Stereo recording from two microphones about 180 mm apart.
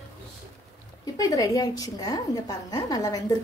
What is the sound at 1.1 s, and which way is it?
A woman's voice, 20° left (ahead or behind).